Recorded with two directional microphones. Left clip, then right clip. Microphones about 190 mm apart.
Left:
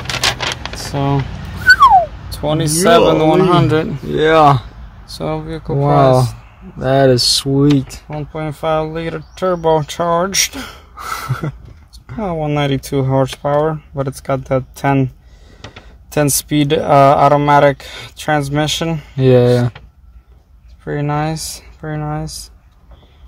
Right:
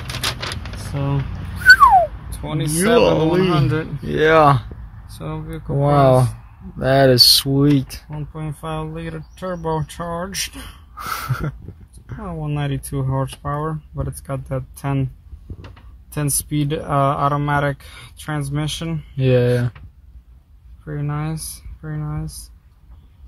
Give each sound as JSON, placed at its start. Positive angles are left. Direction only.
{"t": 1.6, "sound": "a sound", "side_deg": -5}
{"t": 2.3, "sound": "speech", "side_deg": 55}
{"t": 4.1, "sound": "speech", "side_deg": 0}
{"t": 5.1, "sound": "speech", "side_deg": 65}
{"t": 5.8, "sound": "speech", "side_deg": 0}
{"t": 8.2, "sound": "speech", "side_deg": 65}
{"t": 11.0, "sound": "a sound", "side_deg": 0}
{"t": 12.2, "sound": "speech", "side_deg": 60}
{"t": 16.1, "sound": "speech", "side_deg": 65}
{"t": 19.1, "sound": "speech", "side_deg": 20}
{"t": 20.8, "sound": "speech", "side_deg": 70}